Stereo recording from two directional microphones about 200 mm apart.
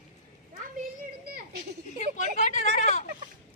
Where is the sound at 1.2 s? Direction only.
50° right (ahead or behind).